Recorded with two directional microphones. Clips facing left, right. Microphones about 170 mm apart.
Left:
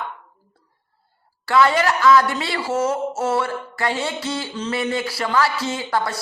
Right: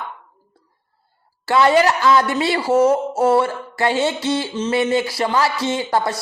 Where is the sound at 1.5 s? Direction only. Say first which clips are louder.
Right 3 dB; 30° right (ahead or behind).